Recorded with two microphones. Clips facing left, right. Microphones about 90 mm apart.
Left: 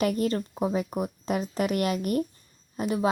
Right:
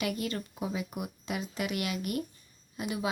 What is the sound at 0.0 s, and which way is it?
A woman's voice, 40° left (ahead or behind).